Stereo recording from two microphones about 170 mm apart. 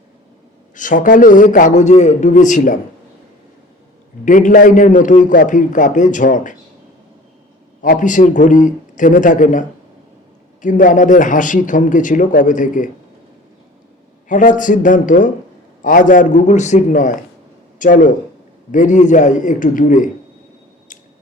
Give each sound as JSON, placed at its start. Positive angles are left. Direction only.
{"t": 0.8, "sound": "a man's voice", "side_deg": 50}
{"t": 4.3, "sound": "a man's voice", "side_deg": 50}
{"t": 7.8, "sound": "a man's voice", "side_deg": 50}
{"t": 14.3, "sound": "a man's voice", "side_deg": 50}